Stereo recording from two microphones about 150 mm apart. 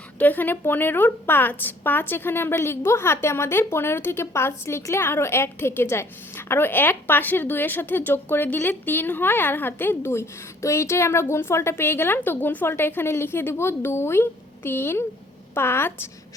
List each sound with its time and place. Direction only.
0.2 s a woman's voice: 10° left (ahead or behind)